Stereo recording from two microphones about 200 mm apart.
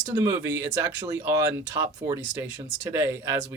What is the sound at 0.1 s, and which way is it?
Speech, 20° right (ahead or behind).